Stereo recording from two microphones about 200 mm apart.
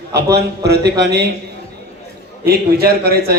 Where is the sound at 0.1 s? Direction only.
55° right (ahead or behind).